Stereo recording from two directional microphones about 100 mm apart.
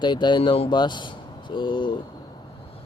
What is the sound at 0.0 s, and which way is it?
Speech, 50° left (ahead or behind).